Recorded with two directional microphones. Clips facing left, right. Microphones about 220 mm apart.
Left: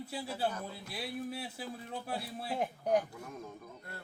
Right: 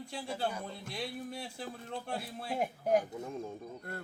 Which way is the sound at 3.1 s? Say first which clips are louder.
Right 6 dB; 25° right (ahead or behind).